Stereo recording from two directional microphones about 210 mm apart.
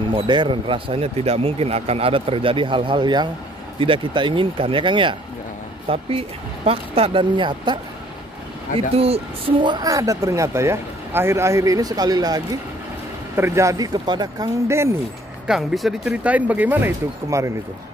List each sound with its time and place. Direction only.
0.1 s speech: 25° right (ahead or behind)
8.9 s speech: 30° right (ahead or behind); by 15.0 s 10° right (ahead or behind)
15.4 s speech: centre (ahead or behind)